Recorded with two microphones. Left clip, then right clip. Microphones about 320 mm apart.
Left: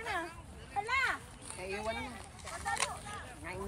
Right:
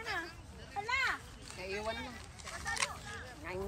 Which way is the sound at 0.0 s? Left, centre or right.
Centre.